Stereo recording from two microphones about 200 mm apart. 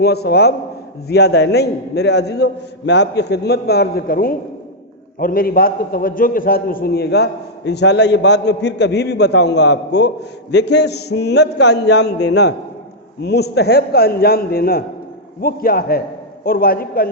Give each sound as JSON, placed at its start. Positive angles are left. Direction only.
{"t": 0.0, "sound": "a man's voice", "side_deg": 55}